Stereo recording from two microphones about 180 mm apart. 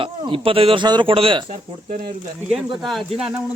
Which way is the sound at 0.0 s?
30° right (ahead or behind).